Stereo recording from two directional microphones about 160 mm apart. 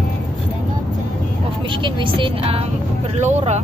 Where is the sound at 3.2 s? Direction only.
45° right (ahead or behind).